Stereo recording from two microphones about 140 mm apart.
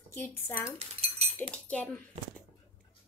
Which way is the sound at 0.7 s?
45° right (ahead or behind).